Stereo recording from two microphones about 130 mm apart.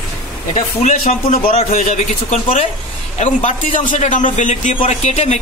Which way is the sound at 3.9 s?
75° left (ahead or behind).